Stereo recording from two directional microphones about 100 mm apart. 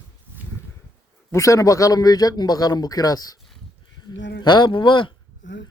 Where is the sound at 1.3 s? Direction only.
30° left (ahead or behind).